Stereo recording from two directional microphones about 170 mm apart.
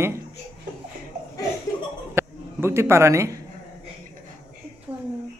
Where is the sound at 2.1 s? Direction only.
15° right (ahead or behind).